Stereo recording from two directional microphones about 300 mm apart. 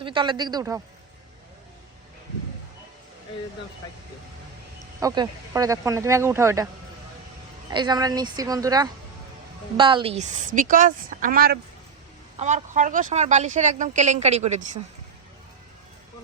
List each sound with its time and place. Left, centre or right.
0.0 s speech: centre
4.9 s speech: centre
7.7 s speech: centre